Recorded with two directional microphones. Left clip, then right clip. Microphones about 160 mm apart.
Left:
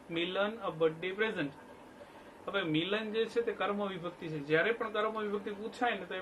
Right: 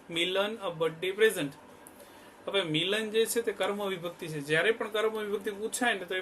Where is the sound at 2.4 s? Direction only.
90° right.